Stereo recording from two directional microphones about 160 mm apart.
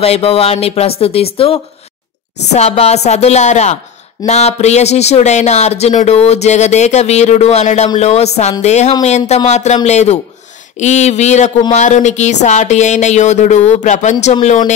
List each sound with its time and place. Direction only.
0.0 s speech: 40° left (ahead or behind)